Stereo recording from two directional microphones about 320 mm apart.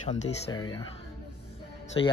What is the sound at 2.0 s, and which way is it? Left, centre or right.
Speech, centre.